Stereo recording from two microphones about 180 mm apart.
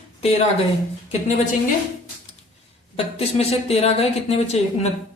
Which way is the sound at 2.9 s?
35° left (ahead or behind).